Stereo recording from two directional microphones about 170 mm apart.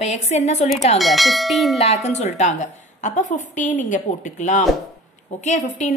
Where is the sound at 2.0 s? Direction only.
40° left (ahead or behind).